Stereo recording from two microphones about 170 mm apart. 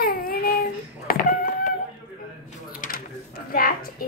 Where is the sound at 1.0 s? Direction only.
55° left (ahead or behind).